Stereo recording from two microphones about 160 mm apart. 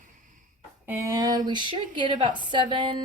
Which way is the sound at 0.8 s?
15° right (ahead or behind).